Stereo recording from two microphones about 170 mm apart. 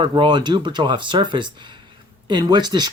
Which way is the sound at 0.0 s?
25° right (ahead or behind).